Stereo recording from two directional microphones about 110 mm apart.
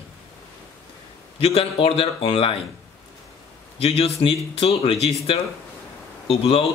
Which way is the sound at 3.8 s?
60° left (ahead or behind).